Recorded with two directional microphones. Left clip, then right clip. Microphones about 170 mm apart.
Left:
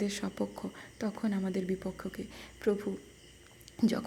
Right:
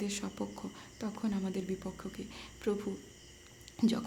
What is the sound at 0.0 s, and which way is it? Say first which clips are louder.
Speech: left 4 dB; 15° left (ahead or behind).